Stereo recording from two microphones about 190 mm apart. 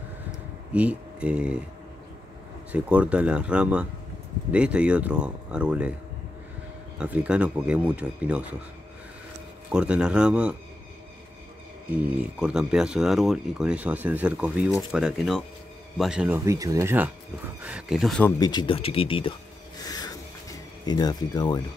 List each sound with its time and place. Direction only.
0.7 s speech: 5° right (ahead or behind)
2.7 s a man's voice: 5° right (ahead or behind)
7.0 s a man's voice: 5° right (ahead or behind)
9.7 s speech: 5° right (ahead or behind)
12.0 s speech: 5° right (ahead or behind)
16.3 s a man's voice: 15° right (ahead or behind); by 18.3 s centre (ahead or behind)
18.4 s speech: 25° left (ahead or behind)
19.8 s a sound: 20° left (ahead or behind)
20.8 s speech: 20° left (ahead or behind)